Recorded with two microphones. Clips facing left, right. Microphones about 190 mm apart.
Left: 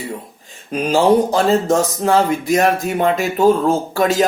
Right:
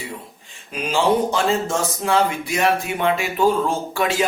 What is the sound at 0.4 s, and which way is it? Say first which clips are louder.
Speech: left 8 dB; 40° left (ahead or behind).